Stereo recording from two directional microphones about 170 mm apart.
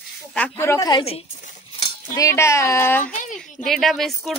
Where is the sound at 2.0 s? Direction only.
15° left (ahead or behind); by 4.4 s centre (ahead or behind).